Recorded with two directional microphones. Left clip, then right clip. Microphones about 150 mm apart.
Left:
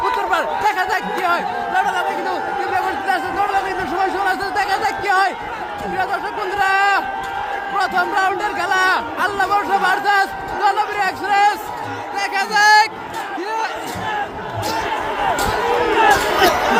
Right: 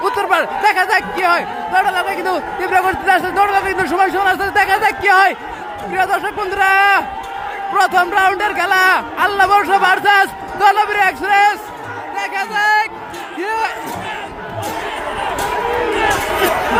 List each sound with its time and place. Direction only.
0.0 s speech: 20° right (ahead or behind)
2.2 s a man's voice: 30° right (ahead or behind)
12.2 s speech: 5° right (ahead or behind)
16.0 s crowd: 50° left (ahead or behind)